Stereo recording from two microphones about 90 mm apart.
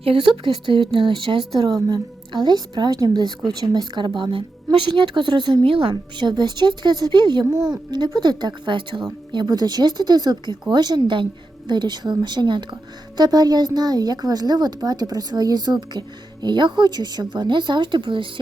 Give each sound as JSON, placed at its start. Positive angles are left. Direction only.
{"t": 0.0, "sound": "a woman's voice", "side_deg": -80}
{"t": 1.6, "sound": "a woman's voice", "side_deg": -50}
{"t": 5.9, "sound": "a woman's voice", "side_deg": -55}